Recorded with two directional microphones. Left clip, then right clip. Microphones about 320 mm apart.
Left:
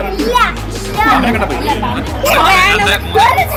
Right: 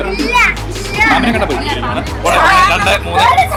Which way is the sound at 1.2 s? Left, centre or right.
Centre.